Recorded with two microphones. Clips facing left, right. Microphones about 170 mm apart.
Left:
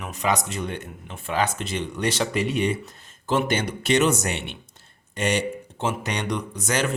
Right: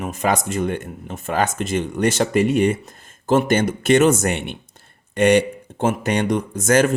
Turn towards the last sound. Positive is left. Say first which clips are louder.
# right 9 dB
turn(degrees=-45)  # may be behind; listen again after turning